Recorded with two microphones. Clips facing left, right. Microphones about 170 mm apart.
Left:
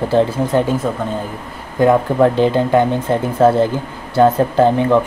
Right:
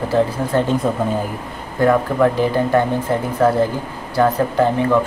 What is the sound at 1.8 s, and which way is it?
Speech, 20° left (ahead or behind).